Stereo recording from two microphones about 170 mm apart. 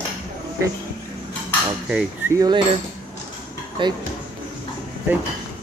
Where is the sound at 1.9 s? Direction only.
10° right (ahead or behind).